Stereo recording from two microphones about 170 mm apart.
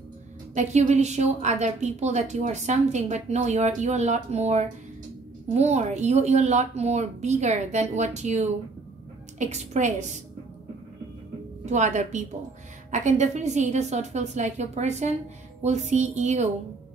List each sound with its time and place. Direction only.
0.6 s a woman's voice: 40° right (ahead or behind)
11.6 s a woman's voice: 45° right (ahead or behind)